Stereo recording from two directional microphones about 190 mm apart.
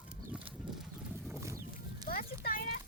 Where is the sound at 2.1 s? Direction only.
50° left (ahead or behind).